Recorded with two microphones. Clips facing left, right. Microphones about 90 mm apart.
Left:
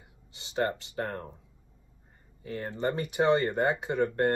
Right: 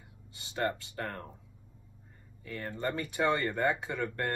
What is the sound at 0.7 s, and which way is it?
Speech, 25° left (ahead or behind).